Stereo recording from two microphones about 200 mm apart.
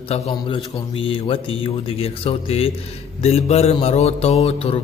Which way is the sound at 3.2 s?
30° left (ahead or behind).